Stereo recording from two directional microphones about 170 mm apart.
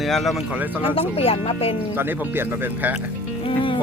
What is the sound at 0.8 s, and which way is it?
Speech, 35° left (ahead or behind).